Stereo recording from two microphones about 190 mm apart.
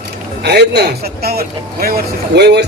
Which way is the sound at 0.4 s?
60° right (ahead or behind).